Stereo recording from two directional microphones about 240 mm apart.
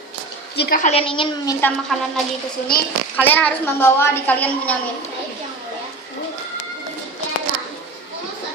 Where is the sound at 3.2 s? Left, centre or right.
Centre.